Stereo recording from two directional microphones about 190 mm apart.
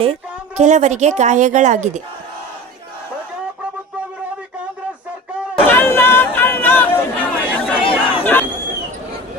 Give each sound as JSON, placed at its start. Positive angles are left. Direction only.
{"t": 0.0, "sound": "a woman's voice", "side_deg": -35}
{"t": 5.6, "sound": "a sound", "side_deg": 10}
{"t": 7.8, "sound": "chatter", "side_deg": 25}
{"t": 8.2, "sound": "crowd", "side_deg": 10}